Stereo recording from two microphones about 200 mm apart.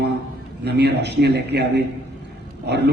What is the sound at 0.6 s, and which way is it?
A man's voice, 55° right (ahead or behind).